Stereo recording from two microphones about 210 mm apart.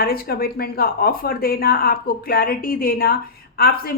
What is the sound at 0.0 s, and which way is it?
A woman's voice, 45° left (ahead or behind).